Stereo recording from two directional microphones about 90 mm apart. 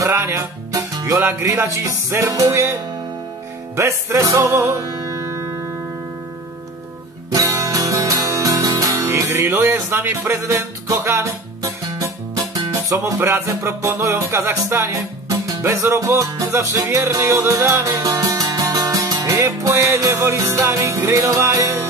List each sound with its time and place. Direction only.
0.1 s music: 30° right (ahead or behind)
7.2 s music: 40° right (ahead or behind)
12.7 s speech: 30° right (ahead or behind)
13.7 s music: 25° right (ahead or behind)
18.0 s music: 45° right (ahead or behind)